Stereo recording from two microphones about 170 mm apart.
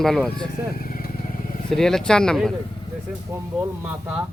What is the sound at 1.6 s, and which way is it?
Speech, 5° left (ahead or behind).